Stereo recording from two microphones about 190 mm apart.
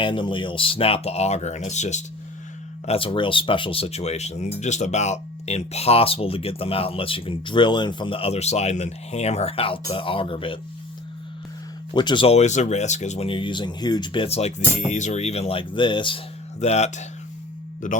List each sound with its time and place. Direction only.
0.0 s speech: 25° left (ahead or behind)
11.9 s a man's voice: 25° left (ahead or behind); by 18.0 s 45° left (ahead or behind)